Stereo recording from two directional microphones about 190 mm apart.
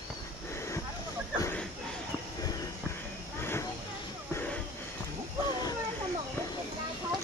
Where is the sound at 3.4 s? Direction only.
10° left (ahead or behind).